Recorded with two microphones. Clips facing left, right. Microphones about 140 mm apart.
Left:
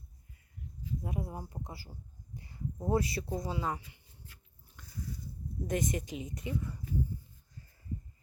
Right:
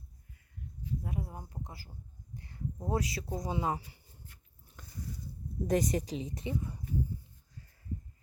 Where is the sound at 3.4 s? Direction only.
20° right (ahead or behind).